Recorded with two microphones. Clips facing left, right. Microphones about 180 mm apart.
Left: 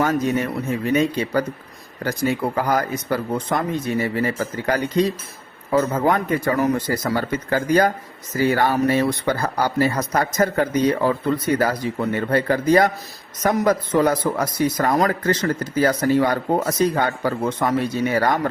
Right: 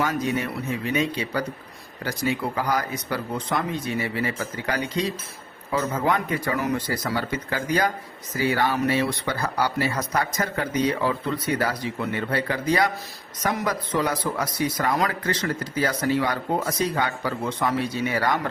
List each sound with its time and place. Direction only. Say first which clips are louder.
0.0 s speech: left 5 dB; 45° left (ahead or behind)